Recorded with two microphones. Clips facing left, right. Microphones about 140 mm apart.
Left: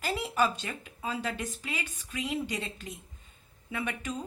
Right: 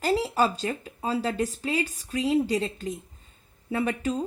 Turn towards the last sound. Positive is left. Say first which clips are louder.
# right 8 dB
turn(degrees=-35)  # may be behind; listen again after turning